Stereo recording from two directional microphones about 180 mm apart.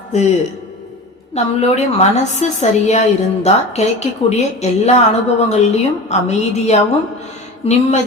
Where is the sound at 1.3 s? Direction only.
40° left (ahead or behind).